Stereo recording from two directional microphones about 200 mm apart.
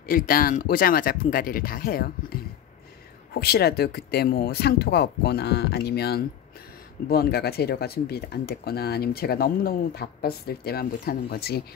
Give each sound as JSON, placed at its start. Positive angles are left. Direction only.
{"t": 0.0, "sound": "speech", "side_deg": 45}